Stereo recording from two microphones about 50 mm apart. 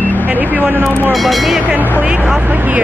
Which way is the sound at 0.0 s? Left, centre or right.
Left.